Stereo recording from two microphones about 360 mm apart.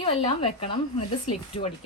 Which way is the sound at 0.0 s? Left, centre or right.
Centre.